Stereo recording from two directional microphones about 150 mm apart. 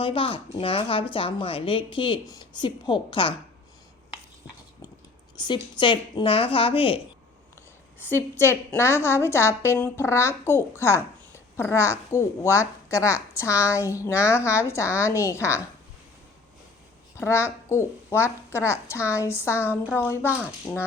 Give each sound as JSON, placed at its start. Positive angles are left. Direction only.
{"t": 0.0, "sound": "a woman's voice", "side_deg": 35}
{"t": 5.4, "sound": "a woman's voice", "side_deg": 30}
{"t": 7.9, "sound": "a woman's voice", "side_deg": 15}
{"t": 17.2, "sound": "a woman's voice", "side_deg": 15}